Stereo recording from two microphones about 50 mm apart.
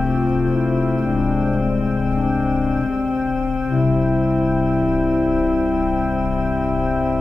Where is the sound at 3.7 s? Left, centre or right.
Centre.